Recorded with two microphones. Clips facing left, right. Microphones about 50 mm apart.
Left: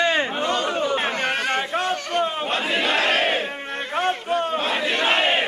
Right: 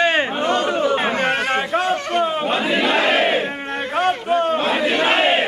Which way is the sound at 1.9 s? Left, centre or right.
Right.